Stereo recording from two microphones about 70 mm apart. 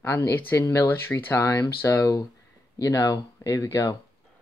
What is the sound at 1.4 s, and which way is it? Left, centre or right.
Speech, left.